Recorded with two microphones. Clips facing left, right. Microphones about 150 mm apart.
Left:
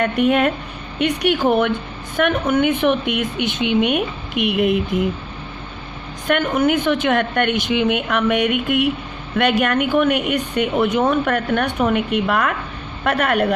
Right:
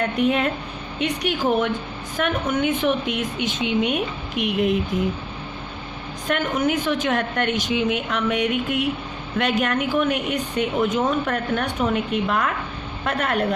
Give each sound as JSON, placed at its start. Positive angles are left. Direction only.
{"t": 0.0, "sound": "speech", "side_deg": 65}
{"t": 6.2, "sound": "speech", "side_deg": 65}